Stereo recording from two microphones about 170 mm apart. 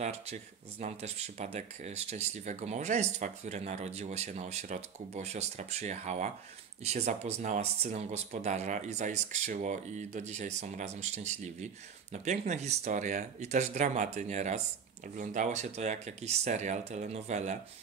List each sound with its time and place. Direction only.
0.0 s speech: 40° right (ahead or behind)